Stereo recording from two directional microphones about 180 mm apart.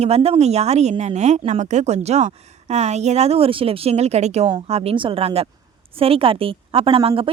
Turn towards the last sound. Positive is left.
turn(degrees=-30)  # may be behind; listen again after turning